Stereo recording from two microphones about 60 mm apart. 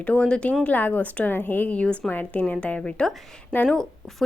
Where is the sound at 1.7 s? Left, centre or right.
Centre.